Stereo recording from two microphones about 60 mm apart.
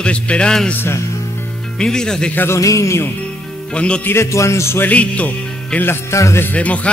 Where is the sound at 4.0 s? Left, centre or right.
Left.